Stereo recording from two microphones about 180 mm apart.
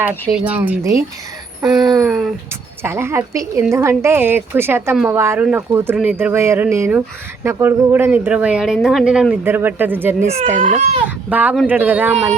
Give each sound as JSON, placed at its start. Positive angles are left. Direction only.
{"t": 0.3, "sound": "speech", "side_deg": -5}
{"t": 1.7, "sound": "a sound", "side_deg": 0}
{"t": 2.8, "sound": "speech", "side_deg": -15}
{"t": 10.6, "sound": "speech", "side_deg": -40}
{"t": 11.3, "sound": "speech", "side_deg": -10}